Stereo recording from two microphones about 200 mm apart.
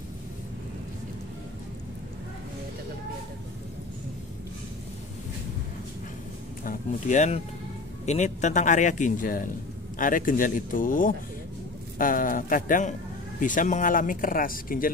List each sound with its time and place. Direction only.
6.6 s a man's voice: 40° left (ahead or behind)